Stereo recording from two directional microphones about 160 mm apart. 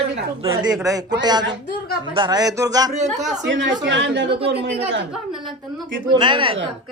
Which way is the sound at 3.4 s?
90° right.